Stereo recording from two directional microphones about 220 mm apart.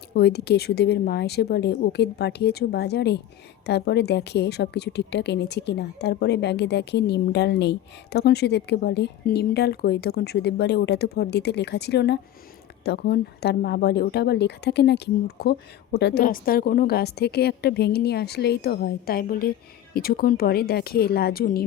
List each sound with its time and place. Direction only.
0.1 s a woman's voice: 50° left (ahead or behind)